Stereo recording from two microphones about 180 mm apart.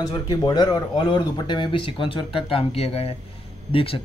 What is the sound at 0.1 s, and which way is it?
Speech, 20° left (ahead or behind).